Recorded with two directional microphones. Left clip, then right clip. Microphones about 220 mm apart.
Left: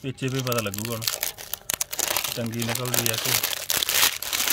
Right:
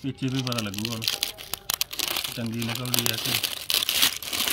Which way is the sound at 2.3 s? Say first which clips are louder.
Left 3 dB; 50° left (ahead or behind).